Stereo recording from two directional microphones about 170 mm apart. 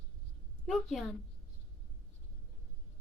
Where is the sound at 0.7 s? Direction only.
Centre (ahead or behind).